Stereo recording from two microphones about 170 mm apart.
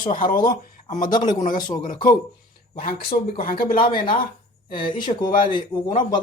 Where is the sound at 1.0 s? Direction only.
25° left (ahead or behind).